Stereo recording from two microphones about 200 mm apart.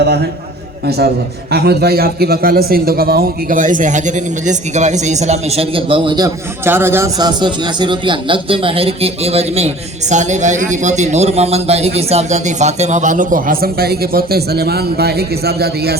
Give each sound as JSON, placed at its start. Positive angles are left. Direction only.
{"t": 0.9, "sound": "a man's voice", "side_deg": -55}